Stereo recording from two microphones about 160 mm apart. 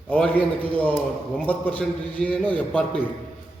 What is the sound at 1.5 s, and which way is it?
A man's voice, 10° left (ahead or behind).